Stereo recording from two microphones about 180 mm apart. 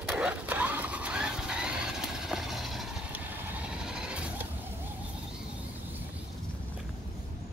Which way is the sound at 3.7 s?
5° right (ahead or behind).